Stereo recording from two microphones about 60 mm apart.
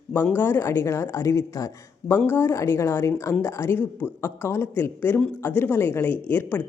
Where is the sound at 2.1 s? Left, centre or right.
Left.